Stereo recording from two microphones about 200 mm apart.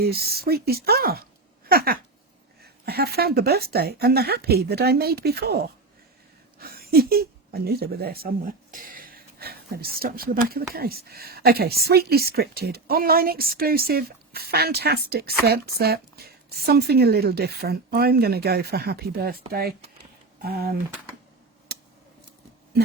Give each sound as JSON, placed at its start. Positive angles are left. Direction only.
{"t": 0.0, "sound": "speech", "side_deg": -50}
{"t": 1.6, "sound": "a sound", "side_deg": -50}
{"t": 2.8, "sound": "speech", "side_deg": -50}
{"t": 21.7, "sound": "scissors", "side_deg": -55}